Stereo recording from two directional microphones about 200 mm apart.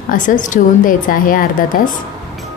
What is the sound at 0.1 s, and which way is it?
A woman's voice, 40° left (ahead or behind).